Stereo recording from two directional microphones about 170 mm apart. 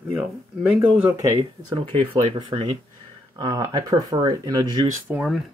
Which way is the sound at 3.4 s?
25° right (ahead or behind).